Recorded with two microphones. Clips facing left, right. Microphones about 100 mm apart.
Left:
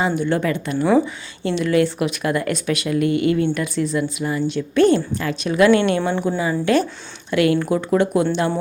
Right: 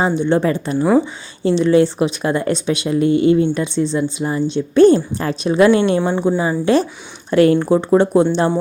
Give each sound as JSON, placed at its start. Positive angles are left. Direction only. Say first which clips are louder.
{"t": 0.0, "sound": "a woman's voice", "louder": "right 4 dB", "side_deg": -25}